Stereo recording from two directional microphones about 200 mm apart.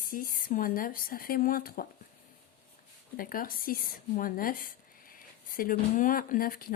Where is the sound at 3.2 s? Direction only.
45° left (ahead or behind).